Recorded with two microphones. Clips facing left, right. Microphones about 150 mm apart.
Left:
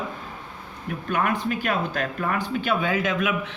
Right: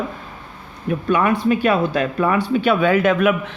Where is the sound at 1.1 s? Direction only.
90° right; by 3.6 s 55° right (ahead or behind).